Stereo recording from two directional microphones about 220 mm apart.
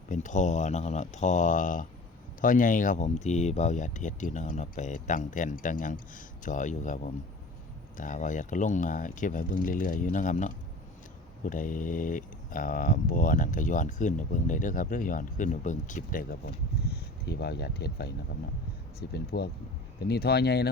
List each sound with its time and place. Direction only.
0.1 s speech: 35° left (ahead or behind)
16.9 s speech: 45° left (ahead or behind)